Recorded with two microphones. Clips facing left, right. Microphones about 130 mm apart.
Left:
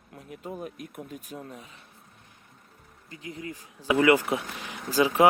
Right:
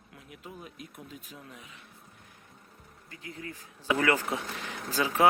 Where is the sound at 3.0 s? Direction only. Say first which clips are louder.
Left 4 dB; 20° left (ahead or behind).